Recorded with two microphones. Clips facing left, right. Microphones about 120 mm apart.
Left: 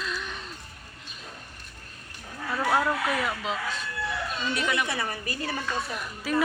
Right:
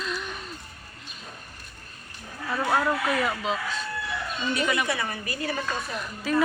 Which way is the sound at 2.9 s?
10° right (ahead or behind).